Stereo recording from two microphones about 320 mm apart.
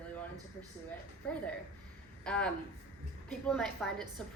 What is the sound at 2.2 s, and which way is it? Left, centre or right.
A woman's voice, centre.